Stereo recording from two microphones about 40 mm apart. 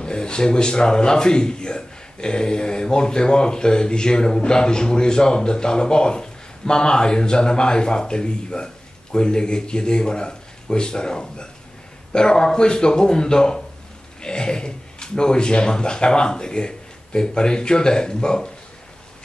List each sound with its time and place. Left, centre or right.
0.0 s a man's voice: left